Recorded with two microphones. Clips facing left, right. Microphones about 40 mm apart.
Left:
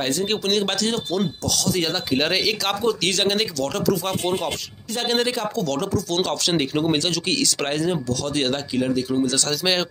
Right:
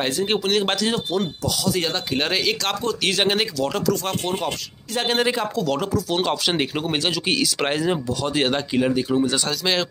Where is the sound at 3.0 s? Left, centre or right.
Centre.